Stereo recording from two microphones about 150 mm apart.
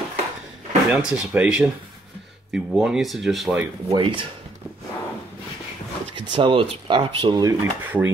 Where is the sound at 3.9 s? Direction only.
35° right (ahead or behind).